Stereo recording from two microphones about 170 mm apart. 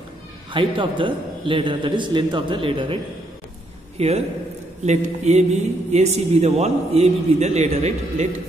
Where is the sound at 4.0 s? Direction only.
40° right (ahead or behind).